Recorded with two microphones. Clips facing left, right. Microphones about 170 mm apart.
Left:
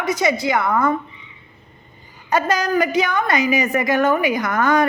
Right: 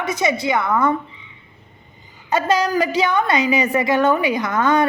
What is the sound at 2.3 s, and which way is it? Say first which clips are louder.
A woman's voice: right 1 dB; 25° right (ahead or behind).